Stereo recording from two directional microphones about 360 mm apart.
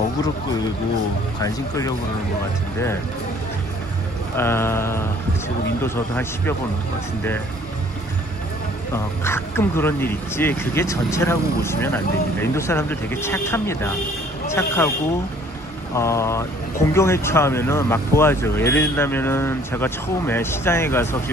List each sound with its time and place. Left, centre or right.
1.4 s speech: centre
4.4 s speech: centre
8.9 s speech: centre
15.9 s speech: centre